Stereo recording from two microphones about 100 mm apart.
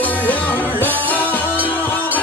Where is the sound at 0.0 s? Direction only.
20° left (ahead or behind).